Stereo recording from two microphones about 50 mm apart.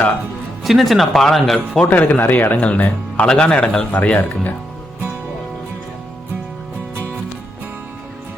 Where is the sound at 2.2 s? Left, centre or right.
Left; by 3.9 s centre.